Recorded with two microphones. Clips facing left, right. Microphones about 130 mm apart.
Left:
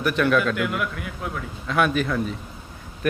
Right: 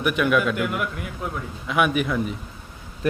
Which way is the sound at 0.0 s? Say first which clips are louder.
Even; 10° right (ahead or behind).